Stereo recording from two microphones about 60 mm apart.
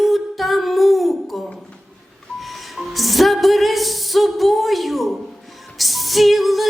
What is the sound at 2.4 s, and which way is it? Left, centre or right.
Music, centre.